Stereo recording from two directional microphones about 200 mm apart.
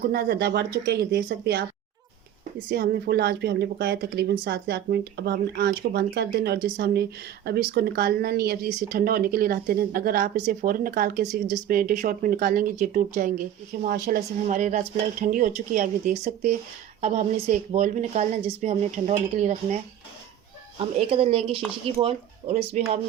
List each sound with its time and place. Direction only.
0.0 s speech: 50° right (ahead or behind)
2.6 s speech: 50° right (ahead or behind); by 22.8 s 30° right (ahead or behind)